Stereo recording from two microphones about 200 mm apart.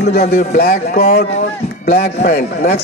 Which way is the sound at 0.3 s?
45° left (ahead or behind).